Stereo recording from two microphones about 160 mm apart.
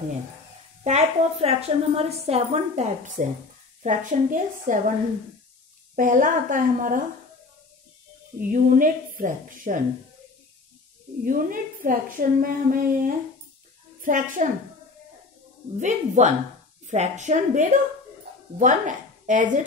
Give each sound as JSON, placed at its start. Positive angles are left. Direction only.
{"t": 0.8, "sound": "a woman's voice", "side_deg": -40}
{"t": 5.9, "sound": "a woman's voice", "side_deg": -55}
{"t": 8.4, "sound": "a woman's voice", "side_deg": -60}
{"t": 11.2, "sound": "a woman's voice", "side_deg": -60}
{"t": 15.8, "sound": "a woman's voice", "side_deg": -45}